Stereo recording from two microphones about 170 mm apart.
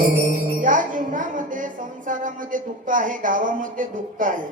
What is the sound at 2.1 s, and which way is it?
Speech, 50° right (ahead or behind).